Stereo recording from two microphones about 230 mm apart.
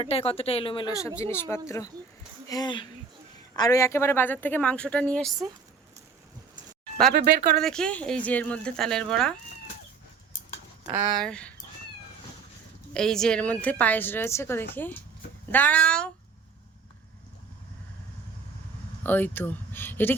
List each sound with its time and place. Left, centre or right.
0.0 s a woman's voice: left; by 5.5 s centre
7.1 s speech: right
7.6 s speech: centre
10.8 s speech: centre
11.2 s speech: centre
12.9 s a woman's voice: centre
19.0 s speech: centre